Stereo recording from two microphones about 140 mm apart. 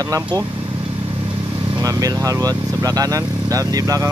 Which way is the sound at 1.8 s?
25° right (ahead or behind).